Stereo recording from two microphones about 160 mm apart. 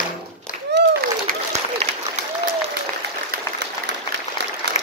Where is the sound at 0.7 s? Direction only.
70° right (ahead or behind).